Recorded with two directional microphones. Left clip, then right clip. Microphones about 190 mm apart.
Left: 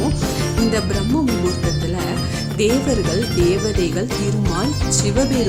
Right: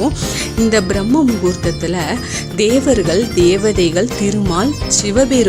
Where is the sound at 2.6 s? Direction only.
25° right (ahead or behind).